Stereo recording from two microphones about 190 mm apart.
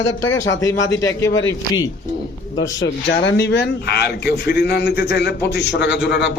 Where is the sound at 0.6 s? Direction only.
15° left (ahead or behind).